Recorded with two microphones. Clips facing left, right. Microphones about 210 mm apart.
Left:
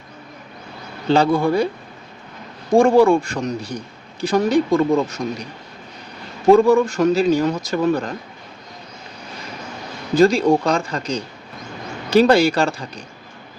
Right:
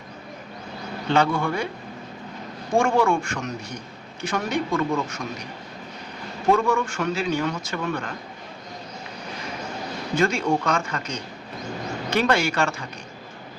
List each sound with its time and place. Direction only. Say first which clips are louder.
1.0 s a man's voice: left 6 dB; 35° left (ahead or behind)
2.7 s a man's voice: left 8 dB; 35° left (ahead or behind)
6.5 s a man's voice: left 9 dB; 35° left (ahead or behind)
10.2 s a man's voice: left 8 dB; 35° left (ahead or behind)